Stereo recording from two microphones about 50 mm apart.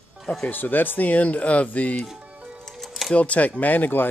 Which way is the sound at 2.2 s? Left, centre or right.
Right.